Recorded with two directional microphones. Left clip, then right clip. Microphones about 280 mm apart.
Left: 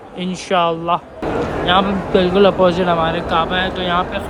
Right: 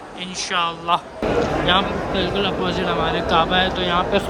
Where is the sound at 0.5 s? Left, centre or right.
Centre.